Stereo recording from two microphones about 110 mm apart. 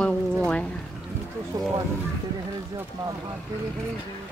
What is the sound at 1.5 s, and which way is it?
Speech, 30° right (ahead or behind).